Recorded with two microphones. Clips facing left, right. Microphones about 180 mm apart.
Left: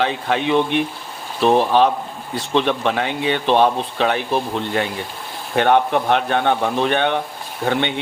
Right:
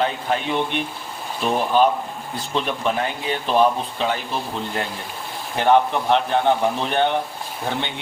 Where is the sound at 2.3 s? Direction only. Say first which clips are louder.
Left 6 dB; 75° left (ahead or behind).